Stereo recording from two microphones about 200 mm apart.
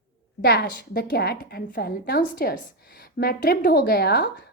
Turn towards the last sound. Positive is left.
turn(degrees=55)  # may be behind; listen again after turning